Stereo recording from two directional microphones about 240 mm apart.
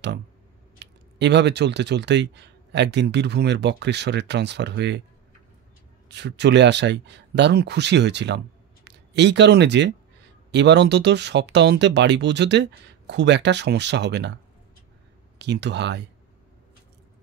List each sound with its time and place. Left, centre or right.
0.7 s speech: right
6.0 s speech: right
15.3 s speech: right